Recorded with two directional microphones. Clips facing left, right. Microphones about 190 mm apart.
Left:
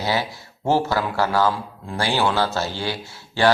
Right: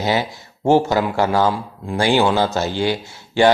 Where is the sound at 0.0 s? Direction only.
20° right (ahead or behind).